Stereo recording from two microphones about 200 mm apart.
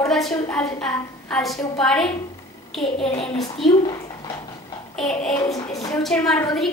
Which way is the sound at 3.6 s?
20° left (ahead or behind).